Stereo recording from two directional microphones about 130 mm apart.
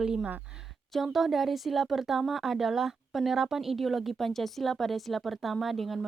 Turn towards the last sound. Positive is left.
turn(degrees=0)  # may be behind; listen again after turning